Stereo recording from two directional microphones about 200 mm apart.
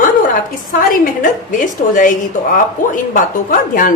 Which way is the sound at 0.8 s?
40° left (ahead or behind).